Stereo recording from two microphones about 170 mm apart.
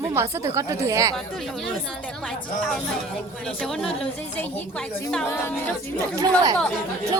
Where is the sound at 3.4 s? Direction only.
5° left (ahead or behind).